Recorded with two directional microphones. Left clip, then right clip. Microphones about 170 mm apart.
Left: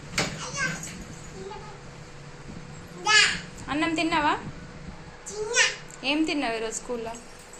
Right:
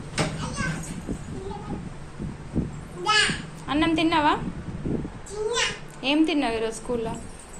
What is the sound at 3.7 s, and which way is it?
Speech, centre (ahead or behind).